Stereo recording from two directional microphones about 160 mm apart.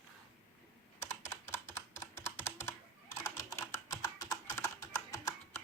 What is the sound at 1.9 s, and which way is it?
Computer keyboard, 15° left (ahead or behind).